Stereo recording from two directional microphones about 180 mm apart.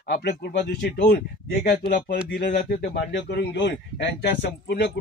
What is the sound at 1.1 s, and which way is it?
Speech, 55° left (ahead or behind).